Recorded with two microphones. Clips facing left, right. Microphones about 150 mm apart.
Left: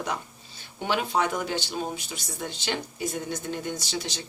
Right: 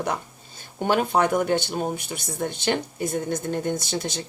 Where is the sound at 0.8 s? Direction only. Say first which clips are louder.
Right 5 dB; 45° right (ahead or behind).